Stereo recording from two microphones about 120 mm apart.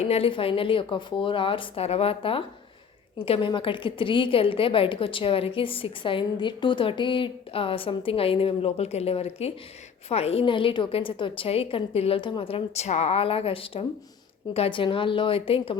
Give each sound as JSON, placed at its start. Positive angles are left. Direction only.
{"t": 0.0, "sound": "a woman's voice", "side_deg": 55}